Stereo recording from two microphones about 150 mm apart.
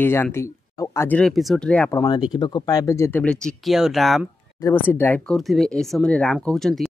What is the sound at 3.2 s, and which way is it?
Speech, 5° left (ahead or behind).